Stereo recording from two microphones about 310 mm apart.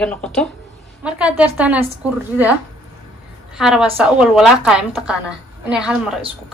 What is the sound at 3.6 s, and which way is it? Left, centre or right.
A woman's voice, centre.